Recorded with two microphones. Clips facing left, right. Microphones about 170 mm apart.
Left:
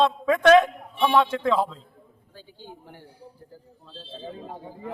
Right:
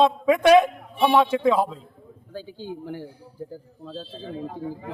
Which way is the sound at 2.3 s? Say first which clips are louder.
Right 10 dB; 90° right.